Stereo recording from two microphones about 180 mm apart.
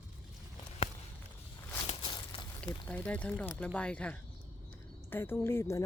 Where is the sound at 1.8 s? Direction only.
30° left (ahead or behind).